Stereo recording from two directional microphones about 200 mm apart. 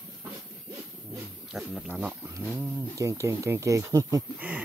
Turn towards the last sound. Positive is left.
turn(degrees=-10)  # may be behind; listen again after turning